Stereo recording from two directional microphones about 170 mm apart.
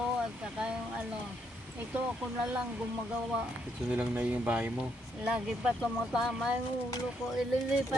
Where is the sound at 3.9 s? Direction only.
5° right (ahead or behind).